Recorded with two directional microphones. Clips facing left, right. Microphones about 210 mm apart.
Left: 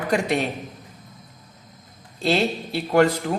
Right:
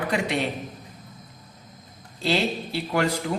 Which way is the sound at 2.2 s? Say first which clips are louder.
Left 3 dB; 50° left (ahead or behind).